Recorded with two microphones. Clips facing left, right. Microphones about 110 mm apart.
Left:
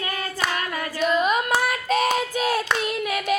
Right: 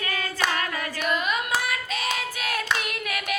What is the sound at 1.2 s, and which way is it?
Hands, 40° left (ahead or behind).